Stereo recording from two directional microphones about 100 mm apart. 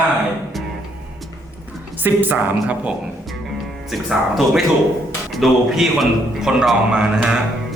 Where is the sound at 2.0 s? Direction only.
20° right (ahead or behind).